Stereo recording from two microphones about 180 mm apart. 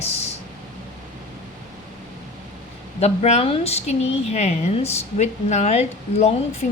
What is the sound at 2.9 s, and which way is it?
A woman's voice, 35° left (ahead or behind).